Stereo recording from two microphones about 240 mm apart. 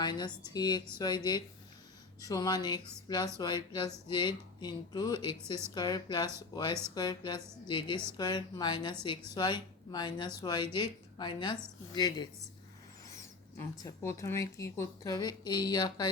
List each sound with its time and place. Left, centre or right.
0.0 s a woman's voice: centre
13.8 s speech: centre